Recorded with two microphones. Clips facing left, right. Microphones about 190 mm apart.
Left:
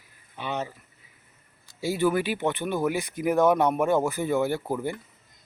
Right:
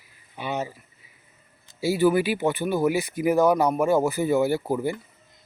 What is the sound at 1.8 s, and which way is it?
Speech, 5° right (ahead or behind).